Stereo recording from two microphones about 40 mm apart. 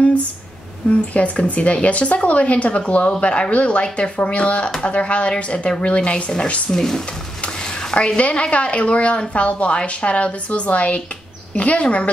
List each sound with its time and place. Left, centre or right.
0.8 s speech: left
6.7 s speech: centre
7.4 s speech: left